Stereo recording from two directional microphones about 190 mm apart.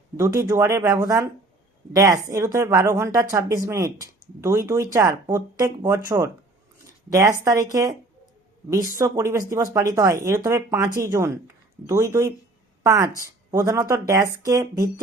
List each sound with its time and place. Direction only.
0.2 s speech: 15° right (ahead or behind)
9.0 s a woman's voice: 15° right (ahead or behind)